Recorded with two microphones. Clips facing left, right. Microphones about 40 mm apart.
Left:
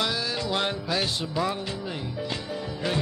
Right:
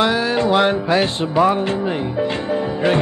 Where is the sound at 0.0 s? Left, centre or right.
Right.